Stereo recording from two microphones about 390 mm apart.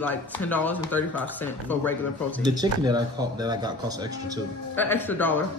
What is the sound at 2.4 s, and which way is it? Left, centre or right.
Speech, centre.